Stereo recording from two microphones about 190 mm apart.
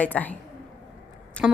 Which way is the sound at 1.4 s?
Centre (ahead or behind).